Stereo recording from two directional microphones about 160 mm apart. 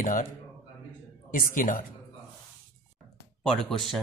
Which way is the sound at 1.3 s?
55° left (ahead or behind).